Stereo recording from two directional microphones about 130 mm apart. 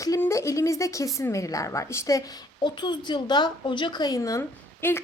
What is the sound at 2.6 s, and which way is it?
A woman's voice, 35° left (ahead or behind).